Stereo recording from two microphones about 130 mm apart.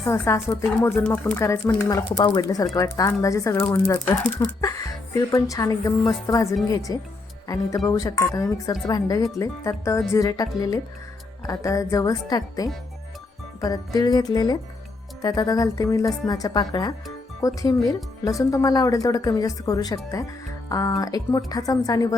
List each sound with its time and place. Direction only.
0.1 s speech: 20° left (ahead or behind)